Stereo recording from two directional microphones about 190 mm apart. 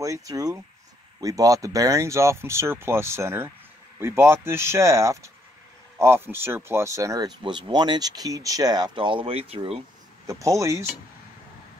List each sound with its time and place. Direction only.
0.0 s speech: 15° right (ahead or behind)
10.2 s speech: 15° right (ahead or behind)